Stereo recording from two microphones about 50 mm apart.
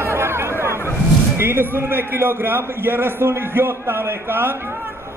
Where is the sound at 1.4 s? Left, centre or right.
Right.